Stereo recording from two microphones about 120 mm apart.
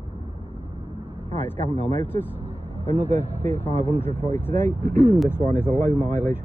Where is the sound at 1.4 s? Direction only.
15° left (ahead or behind).